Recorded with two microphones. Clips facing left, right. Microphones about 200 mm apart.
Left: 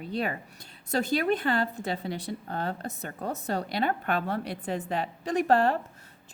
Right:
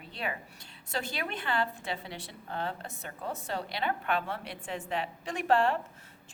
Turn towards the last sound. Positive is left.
turn(degrees=40)  # may be behind; listen again after turning